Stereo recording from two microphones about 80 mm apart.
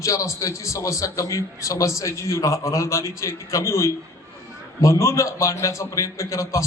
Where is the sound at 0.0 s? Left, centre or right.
Left.